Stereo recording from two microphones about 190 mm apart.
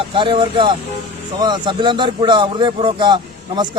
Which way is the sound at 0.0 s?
25° right (ahead or behind).